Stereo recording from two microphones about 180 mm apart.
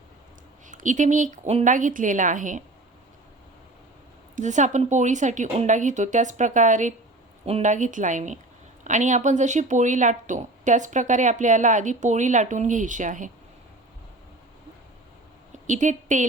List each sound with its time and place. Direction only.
0.7 s speech: 45° right (ahead or behind)
4.4 s speech: 40° right (ahead or behind)
15.6 s a woman's voice: 45° right (ahead or behind)